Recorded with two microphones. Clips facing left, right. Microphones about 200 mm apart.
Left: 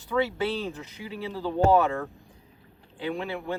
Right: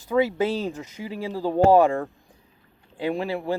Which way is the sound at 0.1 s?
40° right (ahead or behind).